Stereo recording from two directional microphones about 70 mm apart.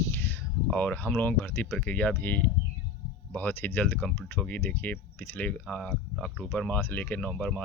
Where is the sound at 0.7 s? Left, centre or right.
Centre.